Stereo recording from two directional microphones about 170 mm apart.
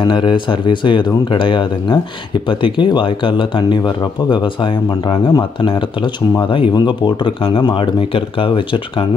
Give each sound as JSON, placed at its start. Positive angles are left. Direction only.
{"t": 0.0, "sound": "speech", "side_deg": 25}